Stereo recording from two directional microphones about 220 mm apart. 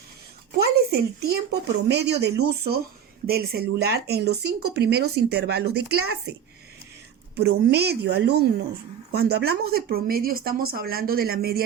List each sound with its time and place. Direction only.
0.6 s speech: 45° right (ahead or behind)
7.6 s speech: 45° right (ahead or behind)